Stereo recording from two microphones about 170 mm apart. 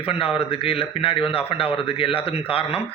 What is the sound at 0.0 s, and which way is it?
A man's voice, 35° left (ahead or behind).